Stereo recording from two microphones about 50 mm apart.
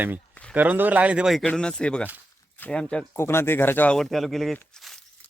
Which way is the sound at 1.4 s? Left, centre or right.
Left.